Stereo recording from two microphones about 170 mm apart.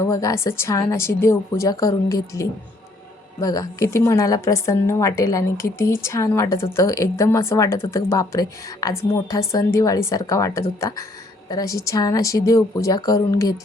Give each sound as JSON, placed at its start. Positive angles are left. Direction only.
{"t": 0.0, "sound": "a woman's voice", "side_deg": 20}